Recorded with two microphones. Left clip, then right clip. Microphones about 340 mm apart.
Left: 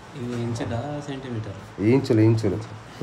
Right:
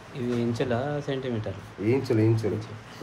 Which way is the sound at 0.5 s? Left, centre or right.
Centre.